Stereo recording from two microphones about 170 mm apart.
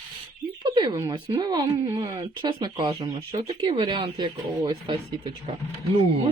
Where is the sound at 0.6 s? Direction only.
25° right (ahead or behind).